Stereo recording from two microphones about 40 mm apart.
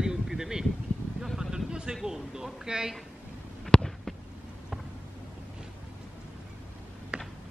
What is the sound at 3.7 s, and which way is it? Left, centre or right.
Fireworks, left.